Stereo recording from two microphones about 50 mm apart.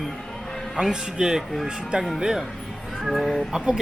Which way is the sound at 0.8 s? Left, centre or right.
Centre.